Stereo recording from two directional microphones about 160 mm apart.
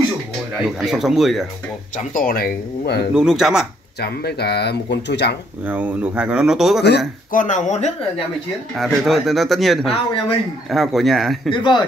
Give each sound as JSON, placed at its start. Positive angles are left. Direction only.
{"t": 0.7, "sound": "speech", "side_deg": 0}
{"t": 2.1, "sound": "speech", "side_deg": 65}
{"t": 3.2, "sound": "speech", "side_deg": -5}
{"t": 4.0, "sound": "speech", "side_deg": 85}
{"t": 5.7, "sound": "speech", "side_deg": -10}
{"t": 7.3, "sound": "speech", "side_deg": 50}
{"t": 8.7, "sound": "speech", "side_deg": 0}
{"t": 9.8, "sound": "speech", "side_deg": 35}
{"t": 10.7, "sound": "speech", "side_deg": 0}
{"t": 11.5, "sound": "speech", "side_deg": 30}